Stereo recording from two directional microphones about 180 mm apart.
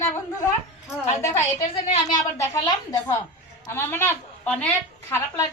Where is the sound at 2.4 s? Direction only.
15° left (ahead or behind).